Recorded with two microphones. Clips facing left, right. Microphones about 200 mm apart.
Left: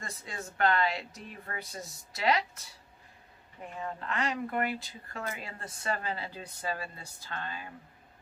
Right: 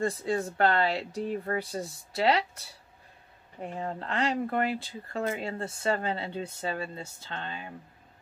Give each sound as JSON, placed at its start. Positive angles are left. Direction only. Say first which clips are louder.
{"t": 0.0, "sound": "speech", "louder": "right 14 dB", "side_deg": -30}
{"t": 3.6, "sound": "speech", "louder": "right 4 dB", "side_deg": -35}